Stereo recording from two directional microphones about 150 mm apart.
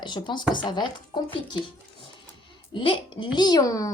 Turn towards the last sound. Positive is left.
turn(degrees=25)  # may be behind; listen again after turning